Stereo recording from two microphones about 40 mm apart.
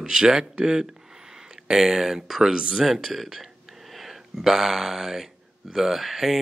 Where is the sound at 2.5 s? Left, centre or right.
Right.